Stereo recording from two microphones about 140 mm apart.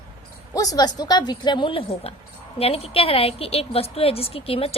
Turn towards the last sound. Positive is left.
turn(degrees=45)  # may be behind; listen again after turning